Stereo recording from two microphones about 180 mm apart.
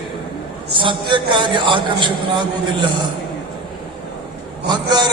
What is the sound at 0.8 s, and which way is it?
A man's voice, 25° right (ahead or behind).